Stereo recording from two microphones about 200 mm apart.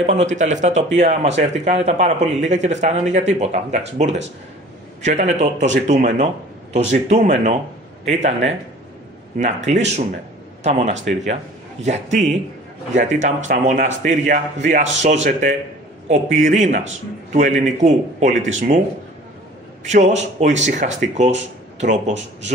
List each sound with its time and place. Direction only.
0.0 s speech: 35° right (ahead or behind)
9.7 s speech: 35° right (ahead or behind)
19.9 s speech: 35° right (ahead or behind)